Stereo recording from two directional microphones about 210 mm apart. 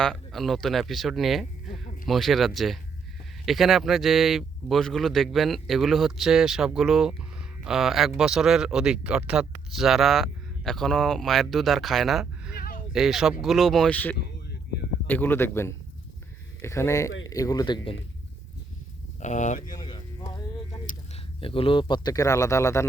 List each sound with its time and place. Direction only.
0.0 s speech: centre (ahead or behind)
12.5 s a sound: 45° left (ahead or behind)
12.9 s a man's voice: centre (ahead or behind); by 17.9 s 20° left (ahead or behind)
19.2 s speech: 35° left (ahead or behind)
19.7 s a sound: 20° left (ahead or behind)
21.4 s a man's voice: 25° left (ahead or behind)